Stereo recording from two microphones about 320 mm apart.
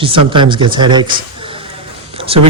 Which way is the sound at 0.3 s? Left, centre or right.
Centre.